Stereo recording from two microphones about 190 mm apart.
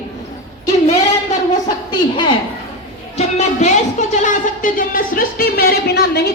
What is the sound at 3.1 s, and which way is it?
Speech, 35° left (ahead or behind).